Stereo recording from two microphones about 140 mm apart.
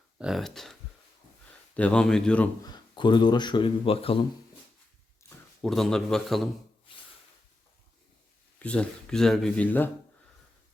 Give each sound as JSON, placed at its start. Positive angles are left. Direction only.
{"t": 0.2, "sound": "a man's voice", "side_deg": 0}
{"t": 2.6, "sound": "speech", "side_deg": 30}
{"t": 5.6, "sound": "a man's voice", "side_deg": 0}
{"t": 8.5, "sound": "speech", "side_deg": 10}